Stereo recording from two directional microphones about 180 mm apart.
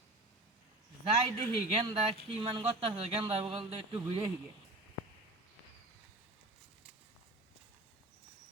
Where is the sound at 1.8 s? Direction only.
30° right (ahead or behind).